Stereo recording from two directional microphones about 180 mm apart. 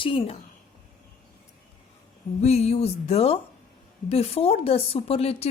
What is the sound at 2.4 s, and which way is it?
A woman's voice, 35° left (ahead or behind).